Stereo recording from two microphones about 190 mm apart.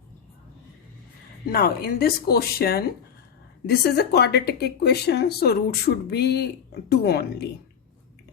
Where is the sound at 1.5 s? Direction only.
55° left (ahead or behind).